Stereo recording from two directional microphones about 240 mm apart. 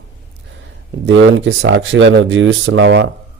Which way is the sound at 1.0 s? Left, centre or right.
Right.